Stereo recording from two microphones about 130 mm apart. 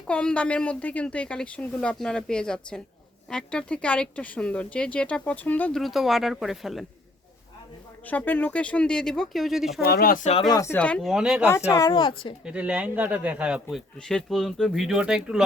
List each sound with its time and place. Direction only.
0.1 s speech: 10° left (ahead or behind)
5.8 s speech: centre (ahead or behind)
8.0 s speech: 15° left (ahead or behind)
10.1 s speech: 85° left
10.5 s speech: 25° left (ahead or behind)
10.8 s speech: 10° left (ahead or behind)
11.9 s speech: 40° left (ahead or behind)
12.5 s speech: 10° right (ahead or behind)